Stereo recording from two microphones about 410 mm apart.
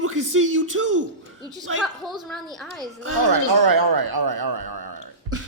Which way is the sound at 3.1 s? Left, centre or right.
Right.